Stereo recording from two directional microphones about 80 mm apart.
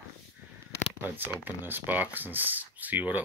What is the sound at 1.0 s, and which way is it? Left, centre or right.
Speech, right.